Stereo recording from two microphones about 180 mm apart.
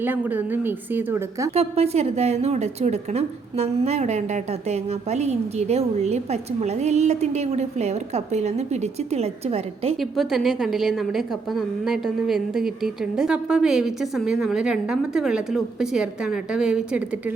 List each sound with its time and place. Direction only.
0.0 s a woman's voice: 10° right (ahead or behind)
1.5 s a woman's voice: 35° right (ahead or behind)
10.0 s a woman's voice: centre (ahead or behind)